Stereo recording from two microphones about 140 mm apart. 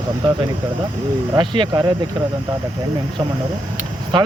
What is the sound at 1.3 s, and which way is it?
Speech, 35° right (ahead or behind).